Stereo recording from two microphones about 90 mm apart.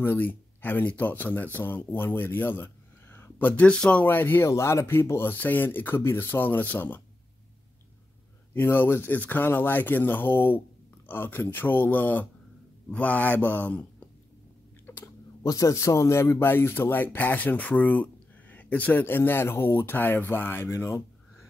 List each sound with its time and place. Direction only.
0.0 s speech: 20° left (ahead or behind)
4.5 s speech: 35° left (ahead or behind)
8.5 s speech: 25° left (ahead or behind)
14.9 s typing: 25° left (ahead or behind)
15.4 s speech: 40° left (ahead or behind)